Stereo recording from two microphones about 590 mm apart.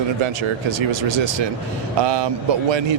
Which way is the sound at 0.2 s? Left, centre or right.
Right.